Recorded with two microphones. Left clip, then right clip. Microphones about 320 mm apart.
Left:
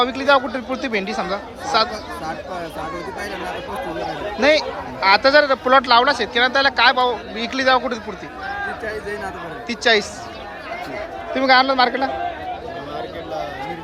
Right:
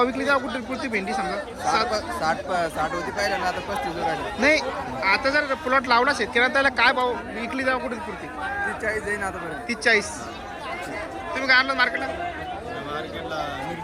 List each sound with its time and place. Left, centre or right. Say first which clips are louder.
0.2 s speech: left 6 dB; centre
4.4 s speech: left 5 dB; centre
11.3 s a man's voice: left 5 dB; centre